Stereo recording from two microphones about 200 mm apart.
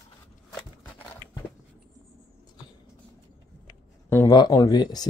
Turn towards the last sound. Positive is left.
turn(degrees=20)  # may be behind; listen again after turning